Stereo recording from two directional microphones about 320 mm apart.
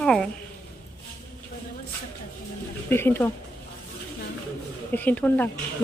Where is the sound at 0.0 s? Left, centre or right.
Centre.